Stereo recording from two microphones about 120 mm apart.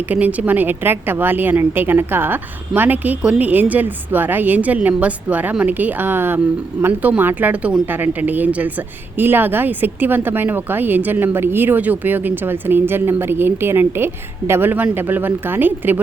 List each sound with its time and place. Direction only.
0.1 s a woman's voice: 10° right (ahead or behind)